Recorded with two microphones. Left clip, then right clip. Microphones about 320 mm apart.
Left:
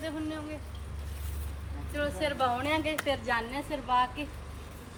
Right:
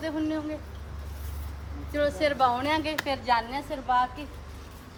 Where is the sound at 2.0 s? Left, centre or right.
Right.